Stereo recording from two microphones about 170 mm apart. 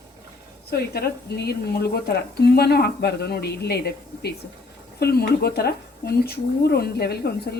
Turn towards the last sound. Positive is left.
turn(degrees=70)  # may be behind; listen again after turning